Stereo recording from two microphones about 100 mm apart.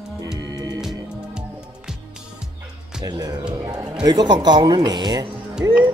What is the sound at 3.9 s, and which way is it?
Speech, 45° right (ahead or behind).